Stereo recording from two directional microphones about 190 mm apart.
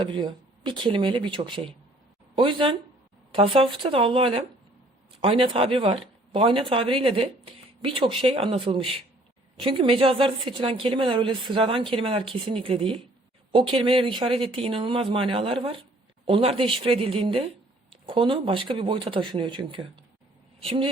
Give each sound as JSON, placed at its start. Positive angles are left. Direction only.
{"t": 0.0, "sound": "a woman's voice", "side_deg": -25}